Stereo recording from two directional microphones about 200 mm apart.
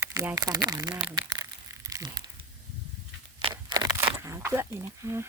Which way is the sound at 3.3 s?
20° right (ahead or behind).